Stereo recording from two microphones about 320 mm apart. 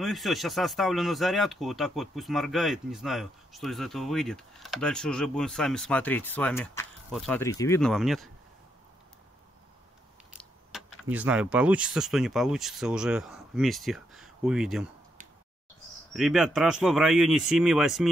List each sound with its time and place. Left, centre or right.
0.0 s speech: centre
11.1 s speech: centre
16.1 s speech: centre